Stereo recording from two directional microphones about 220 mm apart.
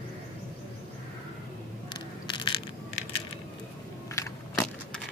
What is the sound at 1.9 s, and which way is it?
Crushing, 20° left (ahead or behind).